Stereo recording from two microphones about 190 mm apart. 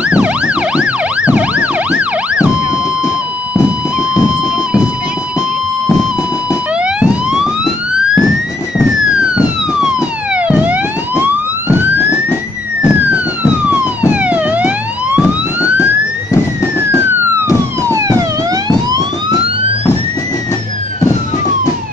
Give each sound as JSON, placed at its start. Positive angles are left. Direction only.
{"t": 0.0, "sound": "emergency vehicle", "side_deg": -5}
{"t": 3.5, "sound": "music", "side_deg": -5}
{"t": 6.8, "sound": "police car", "side_deg": -5}
{"t": 9.3, "sound": "emergency vehicle", "side_deg": -5}
{"t": 10.3, "sound": "police car", "side_deg": -5}
{"t": 12.8, "sound": "emergency vehicle", "side_deg": -5}
{"t": 17.8, "sound": "police car", "side_deg": -15}